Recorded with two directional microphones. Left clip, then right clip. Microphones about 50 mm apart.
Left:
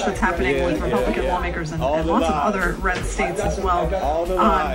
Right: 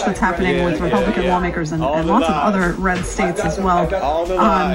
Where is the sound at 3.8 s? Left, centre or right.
Centre.